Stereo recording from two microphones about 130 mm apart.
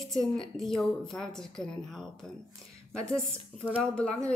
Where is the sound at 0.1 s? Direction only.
5° left (ahead or behind).